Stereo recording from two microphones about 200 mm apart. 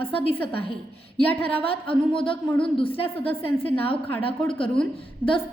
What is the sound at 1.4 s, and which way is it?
Speech, 30° left (ahead or behind).